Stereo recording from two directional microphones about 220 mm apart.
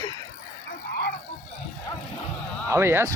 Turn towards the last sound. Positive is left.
turn(degrees=-10)  # may be behind; listen again after turning